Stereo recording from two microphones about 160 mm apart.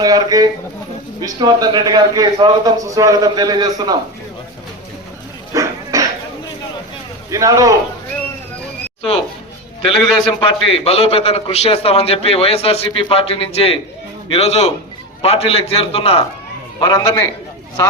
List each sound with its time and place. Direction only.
0.0 s a man's voice: 25° right (ahead or behind)
5.5 s a sound: 20° right (ahead or behind)
7.3 s a man's voice: 20° right (ahead or behind)
10.0 s a man's voice: 5° left (ahead or behind)
10.7 s a man's voice: 35° left (ahead or behind)
16.8 s a man's voice: 20° left (ahead or behind)